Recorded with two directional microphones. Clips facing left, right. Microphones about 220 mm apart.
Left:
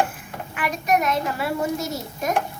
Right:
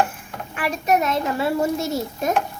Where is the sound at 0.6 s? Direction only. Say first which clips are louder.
Right 2 dB; 30° right (ahead or behind).